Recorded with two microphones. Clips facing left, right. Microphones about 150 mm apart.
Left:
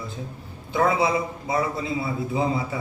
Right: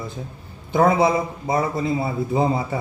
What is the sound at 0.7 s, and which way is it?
A man's voice, 45° right (ahead or behind).